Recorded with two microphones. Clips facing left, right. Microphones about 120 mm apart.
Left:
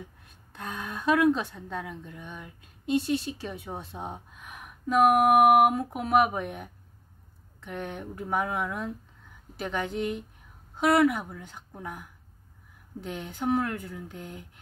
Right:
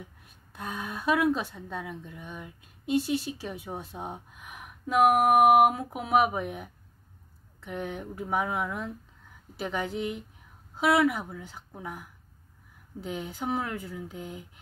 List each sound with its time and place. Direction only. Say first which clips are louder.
0.5 s speech: right 1 dB; 10° right (ahead or behind)